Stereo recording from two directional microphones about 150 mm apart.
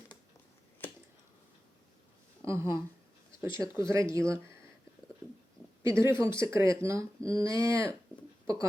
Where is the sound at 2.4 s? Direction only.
20° right (ahead or behind).